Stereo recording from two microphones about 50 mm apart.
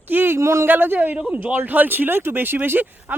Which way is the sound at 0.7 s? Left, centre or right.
Right.